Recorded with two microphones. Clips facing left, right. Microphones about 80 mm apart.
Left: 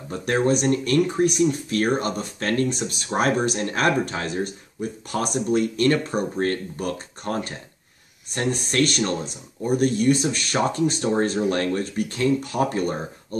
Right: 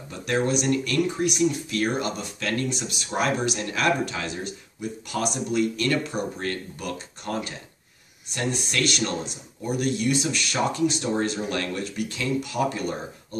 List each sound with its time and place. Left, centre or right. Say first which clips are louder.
0.1 s speech: left 3 dB; left